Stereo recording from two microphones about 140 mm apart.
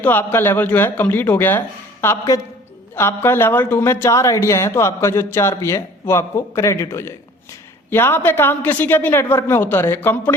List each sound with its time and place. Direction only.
0.0 s a woman's voice: 15° left (ahead or behind)